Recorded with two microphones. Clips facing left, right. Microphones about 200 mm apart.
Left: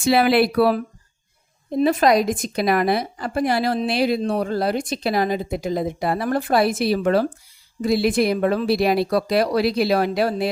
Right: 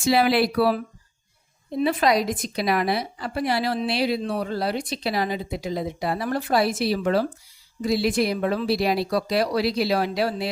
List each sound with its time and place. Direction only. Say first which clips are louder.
0.0 s speech: left 3 dB; 60° left (ahead or behind)
1.7 s speech: left 4 dB; 45° left (ahead or behind)